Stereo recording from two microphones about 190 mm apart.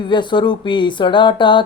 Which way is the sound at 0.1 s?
25° left (ahead or behind).